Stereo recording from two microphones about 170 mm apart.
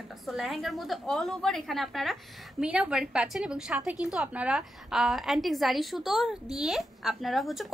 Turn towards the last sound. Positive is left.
turn(degrees=0)  # may be behind; listen again after turning